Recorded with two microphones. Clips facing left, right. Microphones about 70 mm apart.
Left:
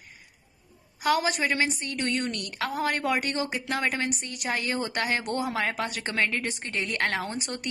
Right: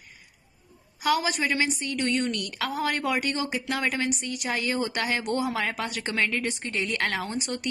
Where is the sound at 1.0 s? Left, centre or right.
Left.